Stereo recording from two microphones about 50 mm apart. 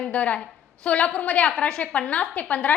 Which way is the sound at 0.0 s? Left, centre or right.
Left.